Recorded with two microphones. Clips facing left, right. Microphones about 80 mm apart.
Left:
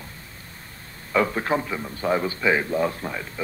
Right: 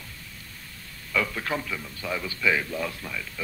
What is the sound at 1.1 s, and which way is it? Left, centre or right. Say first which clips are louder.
A man's voice: left 6 dB; left.